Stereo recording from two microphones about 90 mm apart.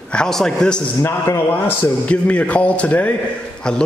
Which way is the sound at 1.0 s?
30° left (ahead or behind).